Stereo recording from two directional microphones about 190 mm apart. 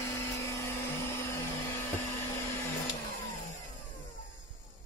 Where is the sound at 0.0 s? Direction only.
15° left (ahead or behind).